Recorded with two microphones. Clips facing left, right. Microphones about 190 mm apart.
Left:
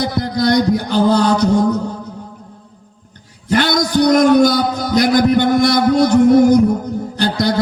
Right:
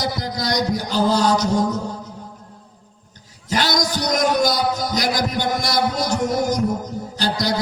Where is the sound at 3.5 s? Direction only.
55° left (ahead or behind).